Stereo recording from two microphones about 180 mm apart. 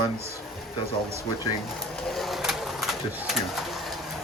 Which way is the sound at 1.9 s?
5° left (ahead or behind).